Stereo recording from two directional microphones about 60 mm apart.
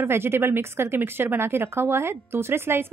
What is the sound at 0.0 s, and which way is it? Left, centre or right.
Speech, right.